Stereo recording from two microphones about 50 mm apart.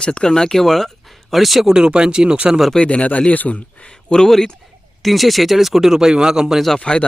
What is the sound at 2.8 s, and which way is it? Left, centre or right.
Speech, left.